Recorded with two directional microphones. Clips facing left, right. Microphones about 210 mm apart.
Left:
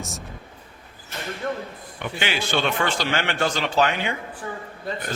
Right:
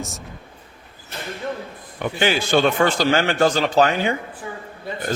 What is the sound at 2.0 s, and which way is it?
A man's voice, 40° right (ahead or behind).